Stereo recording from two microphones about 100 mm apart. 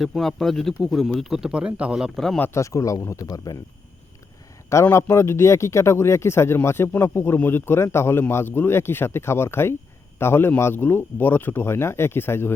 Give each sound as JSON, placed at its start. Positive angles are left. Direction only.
{"t": 0.0, "sound": "speech", "side_deg": 5}
{"t": 2.4, "sound": "speech", "side_deg": 30}
{"t": 4.7, "sound": "speech", "side_deg": 30}